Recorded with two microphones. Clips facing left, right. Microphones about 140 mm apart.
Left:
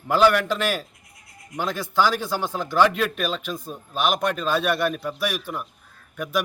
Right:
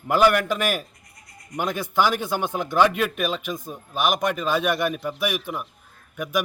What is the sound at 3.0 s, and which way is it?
A man's voice, 5° right (ahead or behind).